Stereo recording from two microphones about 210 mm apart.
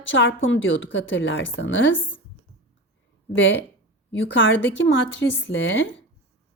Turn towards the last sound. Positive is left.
turn(degrees=60)  # may be behind; listen again after turning